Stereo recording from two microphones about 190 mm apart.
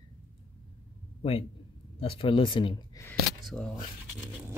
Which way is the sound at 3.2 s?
Centre (ahead or behind).